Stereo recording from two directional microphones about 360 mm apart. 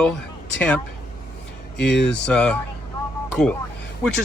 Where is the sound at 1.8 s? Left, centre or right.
Left.